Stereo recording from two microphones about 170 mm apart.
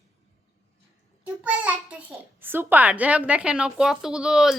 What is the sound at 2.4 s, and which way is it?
A woman's voice, 10° right (ahead or behind).